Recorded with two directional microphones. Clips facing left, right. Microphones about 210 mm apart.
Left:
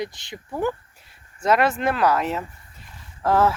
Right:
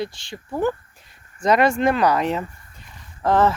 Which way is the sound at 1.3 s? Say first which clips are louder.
Right 3 dB; 5° left (ahead or behind).